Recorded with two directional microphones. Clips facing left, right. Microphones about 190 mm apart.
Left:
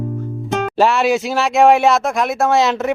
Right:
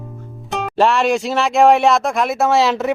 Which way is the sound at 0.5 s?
Centre (ahead or behind).